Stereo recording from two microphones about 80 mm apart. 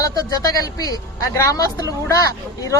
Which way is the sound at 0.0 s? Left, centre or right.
Left.